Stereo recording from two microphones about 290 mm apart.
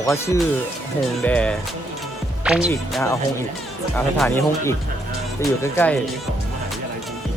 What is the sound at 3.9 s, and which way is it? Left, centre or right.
Speech, centre.